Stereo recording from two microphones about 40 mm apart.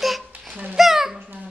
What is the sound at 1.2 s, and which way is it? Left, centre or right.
Dog, right.